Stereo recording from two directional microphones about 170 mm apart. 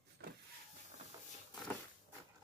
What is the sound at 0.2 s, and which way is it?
Power windows, 70° right (ahead or behind).